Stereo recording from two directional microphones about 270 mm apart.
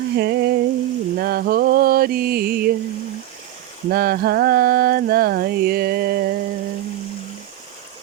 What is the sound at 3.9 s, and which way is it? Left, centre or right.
Mantra, right.